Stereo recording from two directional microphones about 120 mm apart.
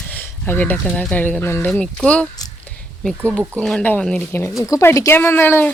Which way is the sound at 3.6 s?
5° left (ahead or behind).